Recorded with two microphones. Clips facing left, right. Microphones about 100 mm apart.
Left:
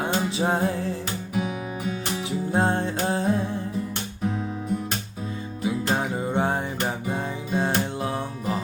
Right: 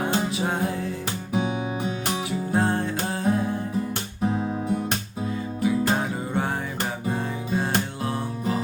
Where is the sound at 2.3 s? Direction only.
25° left (ahead or behind).